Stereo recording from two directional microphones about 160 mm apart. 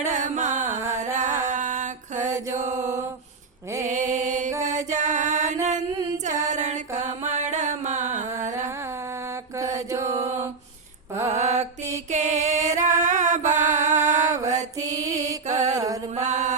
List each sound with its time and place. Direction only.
0.0 s carnatic music: 50° right (ahead or behind)
0.6 s music: 15° right (ahead or behind)
1.1 s music: 50° right (ahead or behind)
2.6 s mantra: 45° right (ahead or behind)
4.7 s music: 50° right (ahead or behind)
9.9 s mantra: 20° right (ahead or behind)
11.3 s mantra: 45° right (ahead or behind)
12.1 s music: 45° right (ahead or behind)
13.9 s mantra: 50° right (ahead or behind)
14.3 s mantra: 20° right (ahead or behind)
14.8 s music: 20° right (ahead or behind)
15.4 s mantra: 45° right (ahead or behind)
15.7 s mantra: 20° right (ahead or behind)
16.1 s mantra: 45° right (ahead or behind)